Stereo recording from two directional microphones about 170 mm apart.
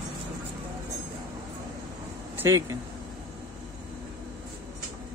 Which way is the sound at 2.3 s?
15° right (ahead or behind).